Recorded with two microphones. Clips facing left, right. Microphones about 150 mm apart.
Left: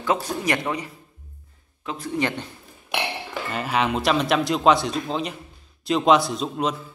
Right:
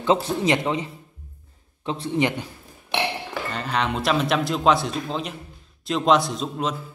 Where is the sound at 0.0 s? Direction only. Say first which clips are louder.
Right 3 dB; 25° right (ahead or behind).